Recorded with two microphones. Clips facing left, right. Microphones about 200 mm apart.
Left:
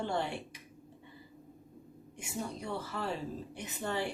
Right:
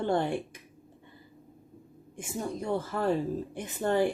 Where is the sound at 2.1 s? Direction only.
50° right (ahead or behind).